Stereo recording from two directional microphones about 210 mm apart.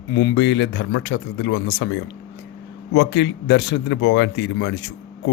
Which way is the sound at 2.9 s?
55° left (ahead or behind).